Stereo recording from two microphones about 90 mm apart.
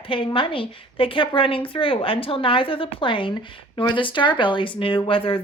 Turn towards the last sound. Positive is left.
turn(degrees=85)